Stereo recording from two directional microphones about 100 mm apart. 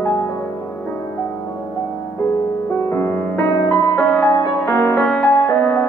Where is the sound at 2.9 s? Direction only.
25° left (ahead or behind).